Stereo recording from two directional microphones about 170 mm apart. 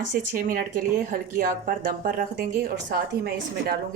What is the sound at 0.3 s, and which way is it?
Speech, 55° right (ahead or behind).